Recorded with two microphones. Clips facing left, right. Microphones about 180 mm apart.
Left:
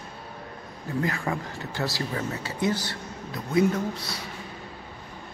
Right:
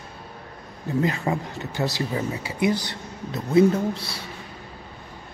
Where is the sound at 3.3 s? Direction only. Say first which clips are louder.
Right 5 dB; 30° right (ahead or behind).